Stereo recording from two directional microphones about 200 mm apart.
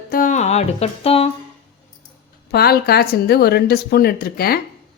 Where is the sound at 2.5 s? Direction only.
50° left (ahead or behind).